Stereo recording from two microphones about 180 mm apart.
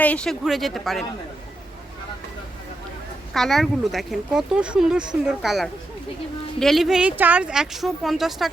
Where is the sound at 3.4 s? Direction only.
Centre (ahead or behind).